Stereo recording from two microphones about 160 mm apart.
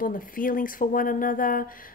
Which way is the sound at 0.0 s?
60° left (ahead or behind).